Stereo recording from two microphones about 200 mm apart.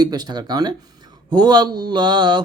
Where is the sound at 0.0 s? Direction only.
20° right (ahead or behind).